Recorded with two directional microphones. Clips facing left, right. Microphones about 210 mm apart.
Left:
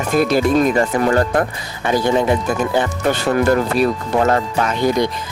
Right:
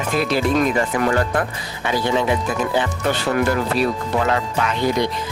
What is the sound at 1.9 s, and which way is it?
Speech, 45° left (ahead or behind).